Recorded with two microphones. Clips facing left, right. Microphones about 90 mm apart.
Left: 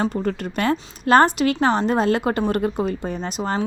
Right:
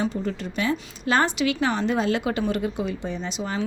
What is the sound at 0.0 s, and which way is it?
A woman's voice, 50° left (ahead or behind).